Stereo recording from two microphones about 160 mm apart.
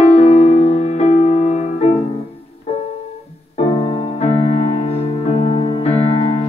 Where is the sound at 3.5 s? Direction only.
40° left (ahead or behind).